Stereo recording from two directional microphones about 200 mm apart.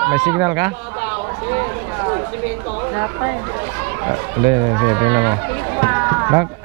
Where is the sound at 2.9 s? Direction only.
15° right (ahead or behind).